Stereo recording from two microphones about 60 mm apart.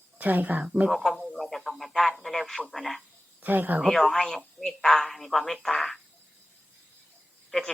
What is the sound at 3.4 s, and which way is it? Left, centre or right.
Speech, right.